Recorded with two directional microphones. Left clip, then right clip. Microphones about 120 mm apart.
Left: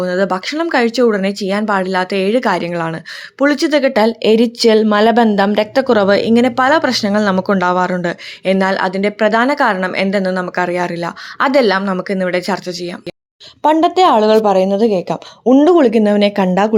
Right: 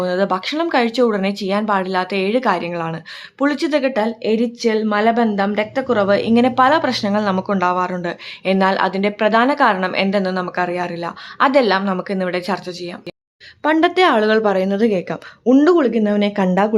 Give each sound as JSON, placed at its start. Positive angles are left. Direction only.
{"t": 0.0, "sound": "speech", "side_deg": 25}
{"t": 6.1, "sound": "a woman's voice", "side_deg": 35}
{"t": 13.7, "sound": "speech", "side_deg": 20}
{"t": 15.8, "sound": "a woman's voice", "side_deg": 40}
{"t": 16.3, "sound": "speech", "side_deg": 15}